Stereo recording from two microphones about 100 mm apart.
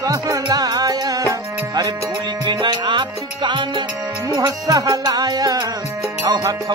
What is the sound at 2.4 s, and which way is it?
Music, 55° right (ahead or behind).